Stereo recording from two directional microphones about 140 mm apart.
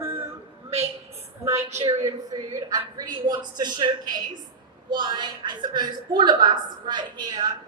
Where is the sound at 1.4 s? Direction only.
20° right (ahead or behind).